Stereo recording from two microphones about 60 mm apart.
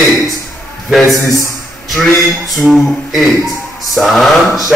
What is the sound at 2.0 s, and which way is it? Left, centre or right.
A man's voice, centre.